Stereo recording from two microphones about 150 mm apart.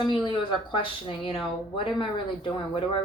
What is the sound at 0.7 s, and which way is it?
Speech, 35° left (ahead or behind).